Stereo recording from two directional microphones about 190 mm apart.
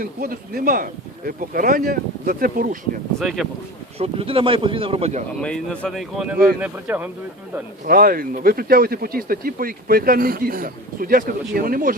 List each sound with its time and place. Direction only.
0.0 s speech: 50° right (ahead or behind)
3.2 s speech: centre (ahead or behind)
3.9 s speech: 30° right (ahead or behind)
5.4 s speech: 5° left (ahead or behind)
7.9 s speech: 50° right (ahead or behind)